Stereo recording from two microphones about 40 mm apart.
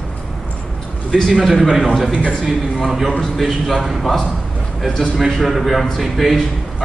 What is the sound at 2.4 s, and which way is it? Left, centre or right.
A man's voice, centre.